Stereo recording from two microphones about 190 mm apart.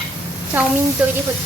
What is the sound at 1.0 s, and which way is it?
Speech, 5° right (ahead or behind).